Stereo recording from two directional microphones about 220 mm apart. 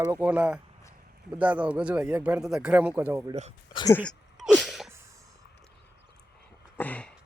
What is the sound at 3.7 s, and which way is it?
Speech, 20° left (ahead or behind).